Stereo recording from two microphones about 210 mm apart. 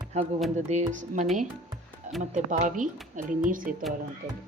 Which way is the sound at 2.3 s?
35° right (ahead or behind).